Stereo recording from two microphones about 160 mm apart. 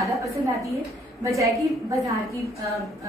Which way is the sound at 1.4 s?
20° right (ahead or behind).